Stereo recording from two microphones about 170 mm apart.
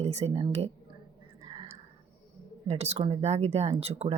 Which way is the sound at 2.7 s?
40° right (ahead or behind).